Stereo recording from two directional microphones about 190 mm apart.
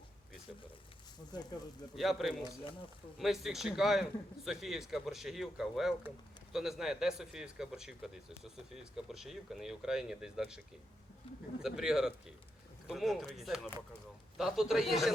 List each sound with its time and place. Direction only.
1.3 s speech: 20° left (ahead or behind)
2.0 s speech: centre (ahead or behind)
11.6 s speech: 5° right (ahead or behind)